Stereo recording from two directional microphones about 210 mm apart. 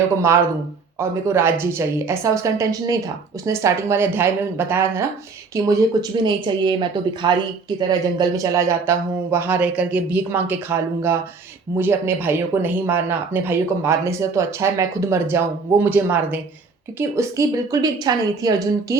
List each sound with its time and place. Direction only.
0.9 s speech: 10° right (ahead or behind)